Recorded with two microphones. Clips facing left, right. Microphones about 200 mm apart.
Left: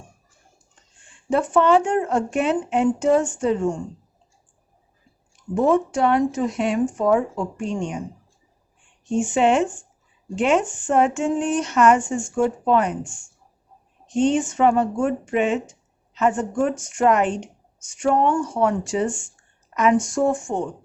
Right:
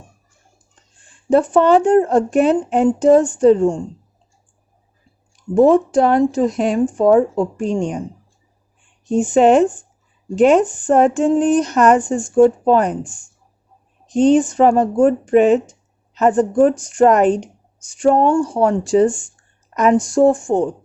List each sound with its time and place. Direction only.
1.0 s speech: 35° right (ahead or behind)
5.4 s speech: 35° right (ahead or behind)
9.0 s speech: 35° right (ahead or behind)